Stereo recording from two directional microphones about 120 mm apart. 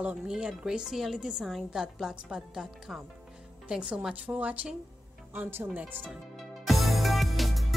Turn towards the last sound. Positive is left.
turn(degrees=0)  # may be behind; listen again after turning